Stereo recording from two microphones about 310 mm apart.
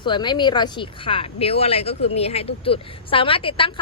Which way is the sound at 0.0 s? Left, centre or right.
Centre.